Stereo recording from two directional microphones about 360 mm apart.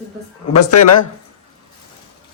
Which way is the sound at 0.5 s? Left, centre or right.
Left.